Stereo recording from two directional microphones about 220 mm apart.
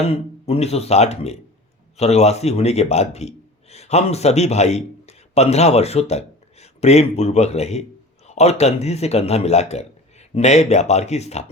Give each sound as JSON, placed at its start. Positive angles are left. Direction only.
{"t": 0.1, "sound": "a man's voice", "side_deg": 25}